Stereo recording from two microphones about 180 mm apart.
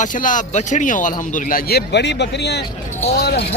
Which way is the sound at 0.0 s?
50° left (ahead or behind).